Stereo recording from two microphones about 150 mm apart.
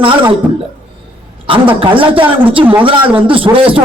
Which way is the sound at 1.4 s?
35° right (ahead or behind).